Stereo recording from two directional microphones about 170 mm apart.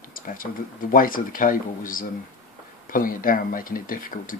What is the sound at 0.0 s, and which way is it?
Speech, 55° left (ahead or behind).